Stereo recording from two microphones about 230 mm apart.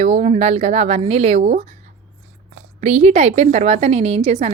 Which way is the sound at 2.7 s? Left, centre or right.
Right.